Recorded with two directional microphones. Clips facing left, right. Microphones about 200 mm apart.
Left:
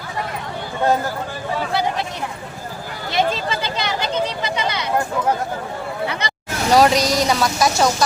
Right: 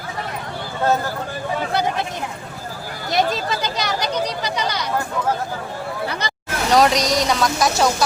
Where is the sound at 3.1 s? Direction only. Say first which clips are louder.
Even; 40° right (ahead or behind).